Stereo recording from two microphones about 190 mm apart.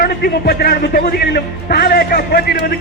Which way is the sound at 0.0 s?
55° left (ahead or behind).